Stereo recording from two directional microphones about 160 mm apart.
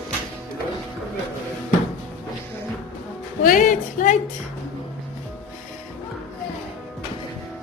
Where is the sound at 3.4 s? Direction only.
55° left (ahead or behind).